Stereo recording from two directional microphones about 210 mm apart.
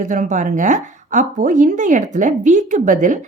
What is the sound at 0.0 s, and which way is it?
A woman's voice, 35° right (ahead or behind).